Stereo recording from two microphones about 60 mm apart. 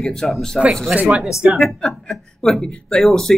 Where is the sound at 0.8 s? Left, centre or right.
Right.